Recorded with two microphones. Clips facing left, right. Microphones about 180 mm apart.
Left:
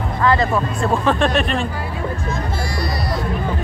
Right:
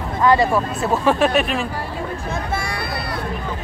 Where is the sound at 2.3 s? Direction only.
60° right (ahead or behind).